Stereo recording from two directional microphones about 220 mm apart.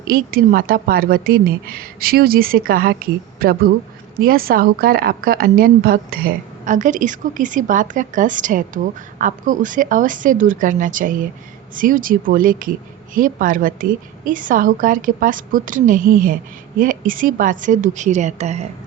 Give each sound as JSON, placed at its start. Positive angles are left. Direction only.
{"t": 0.1, "sound": "a woman's voice", "side_deg": -40}